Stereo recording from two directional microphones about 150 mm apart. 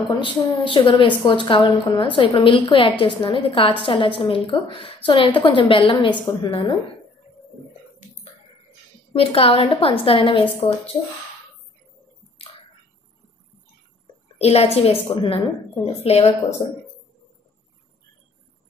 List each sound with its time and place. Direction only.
0.2 s a woman's voice: 35° left (ahead or behind)
9.1 s a woman's voice: 40° left (ahead or behind)
14.4 s a woman's voice: 45° left (ahead or behind)